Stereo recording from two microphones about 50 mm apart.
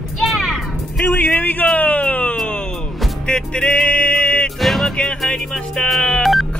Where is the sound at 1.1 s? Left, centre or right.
Left.